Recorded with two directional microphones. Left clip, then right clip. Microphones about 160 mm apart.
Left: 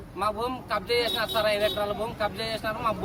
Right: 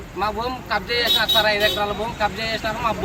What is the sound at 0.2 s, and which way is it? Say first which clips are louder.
Speech: right 4 dB; 35° left (ahead or behind).